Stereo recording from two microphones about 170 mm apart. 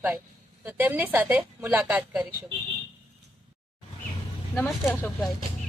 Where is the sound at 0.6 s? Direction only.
10° right (ahead or behind).